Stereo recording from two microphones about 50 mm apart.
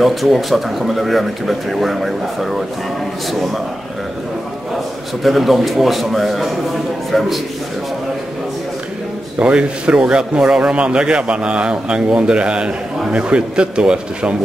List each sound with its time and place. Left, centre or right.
0.0 s a man's voice: centre
5.2 s a man's voice: centre
9.4 s a man's voice: right